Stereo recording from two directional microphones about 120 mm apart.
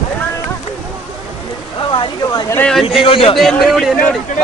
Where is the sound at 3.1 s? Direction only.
50° left (ahead or behind).